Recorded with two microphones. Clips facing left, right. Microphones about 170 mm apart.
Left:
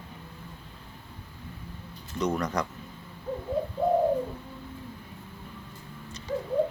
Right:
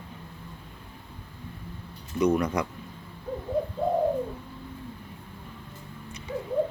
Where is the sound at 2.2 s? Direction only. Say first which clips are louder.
Right 4 dB; 5° right (ahead or behind).